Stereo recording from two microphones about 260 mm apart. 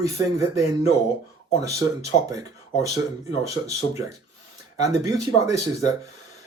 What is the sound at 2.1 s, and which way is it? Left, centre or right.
Speech, left.